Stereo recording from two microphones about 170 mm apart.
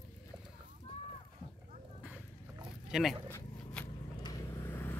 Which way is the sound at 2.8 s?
5° right (ahead or behind).